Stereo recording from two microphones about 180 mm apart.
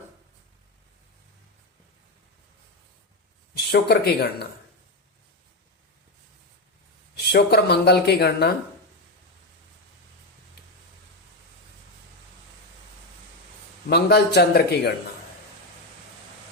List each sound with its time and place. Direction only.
3.5 s speech: 65° left (ahead or behind)
7.3 s speech: 65° left (ahead or behind)
13.9 s speech: 65° left (ahead or behind)